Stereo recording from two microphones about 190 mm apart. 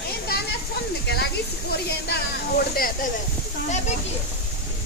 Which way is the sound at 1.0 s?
60° left (ahead or behind).